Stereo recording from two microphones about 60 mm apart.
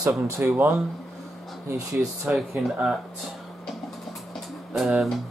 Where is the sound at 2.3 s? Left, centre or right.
Centre.